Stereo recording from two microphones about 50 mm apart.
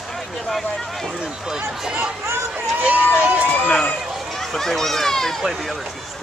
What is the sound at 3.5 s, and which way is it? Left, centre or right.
Run, left.